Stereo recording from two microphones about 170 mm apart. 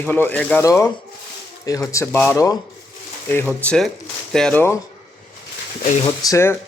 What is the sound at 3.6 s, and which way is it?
Speech, 5° left (ahead or behind).